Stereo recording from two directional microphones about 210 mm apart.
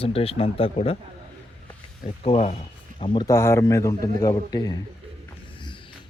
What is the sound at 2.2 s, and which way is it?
Speech, 30° left (ahead or behind).